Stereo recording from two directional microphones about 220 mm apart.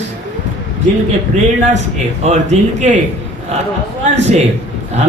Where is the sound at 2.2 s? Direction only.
30° right (ahead or behind).